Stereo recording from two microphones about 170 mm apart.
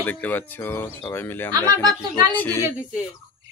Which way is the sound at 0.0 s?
10° left (ahead or behind).